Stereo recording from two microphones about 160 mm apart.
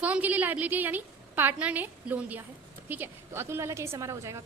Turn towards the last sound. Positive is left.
turn(degrees=-20)  # may be behind; listen again after turning